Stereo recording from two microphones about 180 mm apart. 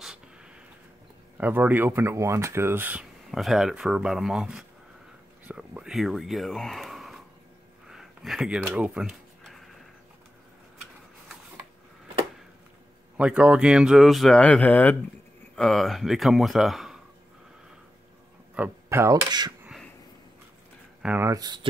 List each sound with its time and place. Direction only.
1.4 s speech: 10° right (ahead or behind)
7.9 s a sound: centre (ahead or behind)
13.2 s speech: 5° right (ahead or behind)
18.5 s speech: 10° right (ahead or behind)
21.0 s speech: 10° right (ahead or behind)